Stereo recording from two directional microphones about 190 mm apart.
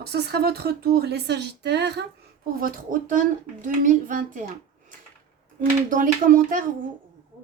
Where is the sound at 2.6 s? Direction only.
45° right (ahead or behind).